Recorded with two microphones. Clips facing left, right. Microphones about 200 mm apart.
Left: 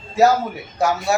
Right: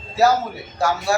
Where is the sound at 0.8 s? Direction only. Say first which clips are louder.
Left 2 dB; 20° left (ahead or behind).